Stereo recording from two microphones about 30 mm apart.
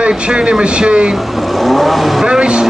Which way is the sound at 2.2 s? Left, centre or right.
Right.